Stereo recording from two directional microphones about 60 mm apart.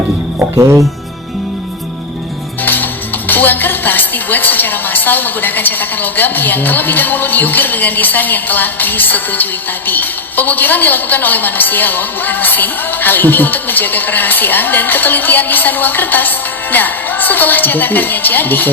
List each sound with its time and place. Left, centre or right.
2.6 s speech: left